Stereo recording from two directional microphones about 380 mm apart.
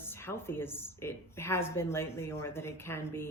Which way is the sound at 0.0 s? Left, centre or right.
Centre.